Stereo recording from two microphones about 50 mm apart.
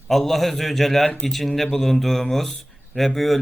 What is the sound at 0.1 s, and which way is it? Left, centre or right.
A man's voice, centre.